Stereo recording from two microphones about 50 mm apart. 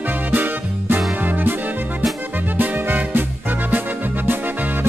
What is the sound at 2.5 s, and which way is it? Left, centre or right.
Music, right.